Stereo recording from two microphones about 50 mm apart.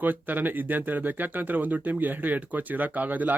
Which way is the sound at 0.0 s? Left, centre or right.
Right.